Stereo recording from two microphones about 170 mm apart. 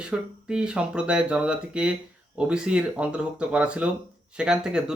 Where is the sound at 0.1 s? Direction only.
5° right (ahead or behind).